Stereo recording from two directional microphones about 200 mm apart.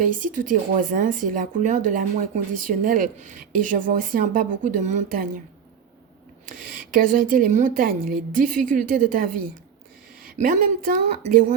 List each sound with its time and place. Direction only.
0.0 s speech: 40° right (ahead or behind)
6.4 s speech: 45° right (ahead or behind)
10.3 s speech: 40° right (ahead or behind)